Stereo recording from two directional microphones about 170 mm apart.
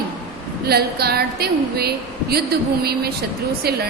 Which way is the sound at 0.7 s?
70° right (ahead or behind).